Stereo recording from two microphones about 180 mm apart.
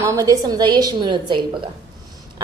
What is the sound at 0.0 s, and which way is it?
A woman's voice, 20° right (ahead or behind).